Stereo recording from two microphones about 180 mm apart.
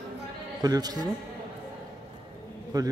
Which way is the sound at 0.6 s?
20° right (ahead or behind).